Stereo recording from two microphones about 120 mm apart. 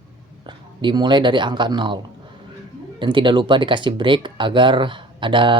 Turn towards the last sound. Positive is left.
turn(degrees=-45)  # may be behind; listen again after turning